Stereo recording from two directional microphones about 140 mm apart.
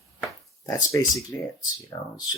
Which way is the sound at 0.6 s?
25° left (ahead or behind).